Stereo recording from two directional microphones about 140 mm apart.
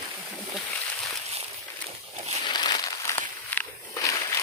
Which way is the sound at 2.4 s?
30° left (ahead or behind).